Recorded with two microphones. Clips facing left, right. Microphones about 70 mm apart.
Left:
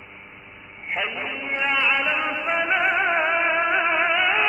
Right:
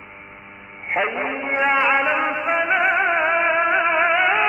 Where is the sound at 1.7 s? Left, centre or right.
Right.